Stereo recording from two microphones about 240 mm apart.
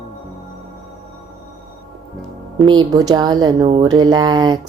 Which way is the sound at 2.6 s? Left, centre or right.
Centre.